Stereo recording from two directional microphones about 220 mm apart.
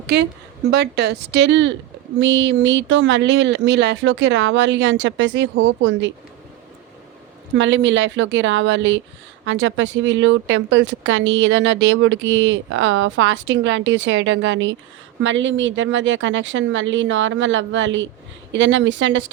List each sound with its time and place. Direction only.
0.1 s speech: 50° right (ahead or behind)
7.5 s speech: 55° right (ahead or behind)